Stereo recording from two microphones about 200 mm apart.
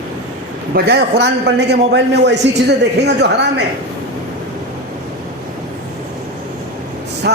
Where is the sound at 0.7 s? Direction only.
55° right (ahead or behind).